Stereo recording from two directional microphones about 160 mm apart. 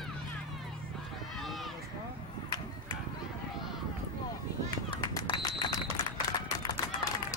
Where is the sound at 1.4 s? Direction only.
Centre (ahead or behind).